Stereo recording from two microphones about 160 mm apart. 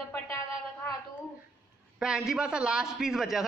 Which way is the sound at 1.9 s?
5° right (ahead or behind).